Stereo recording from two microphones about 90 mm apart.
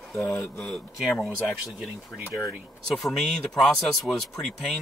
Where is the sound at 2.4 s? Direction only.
5° left (ahead or behind).